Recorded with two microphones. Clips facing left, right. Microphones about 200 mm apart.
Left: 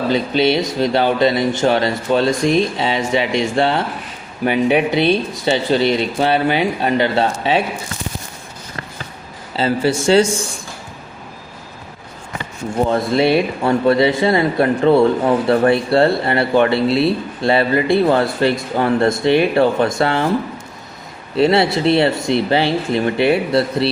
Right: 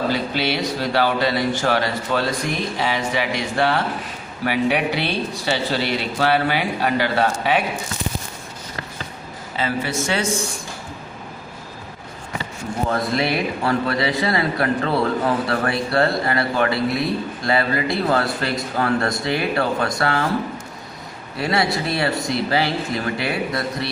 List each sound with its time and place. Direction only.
0.1 s speech: 20° left (ahead or behind)
9.6 s speech: 30° left (ahead or behind)
12.9 s speech: 25° left (ahead or behind)
21.3 s speech: 25° left (ahead or behind)